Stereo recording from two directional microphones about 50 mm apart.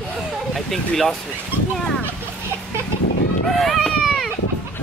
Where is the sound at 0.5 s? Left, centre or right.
Centre.